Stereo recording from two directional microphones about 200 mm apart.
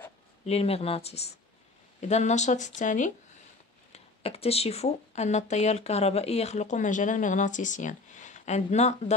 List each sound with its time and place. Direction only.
0.5 s speech: 30° left (ahead or behind)